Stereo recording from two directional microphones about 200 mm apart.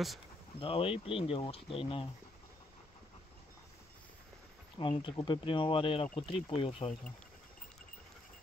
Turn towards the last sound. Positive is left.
turn(degrees=30)  # may be behind; listen again after turning